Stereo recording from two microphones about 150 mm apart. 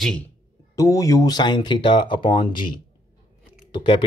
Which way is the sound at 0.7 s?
20° left (ahead or behind).